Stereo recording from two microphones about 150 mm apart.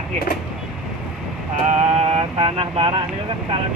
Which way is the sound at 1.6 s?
50° right (ahead or behind).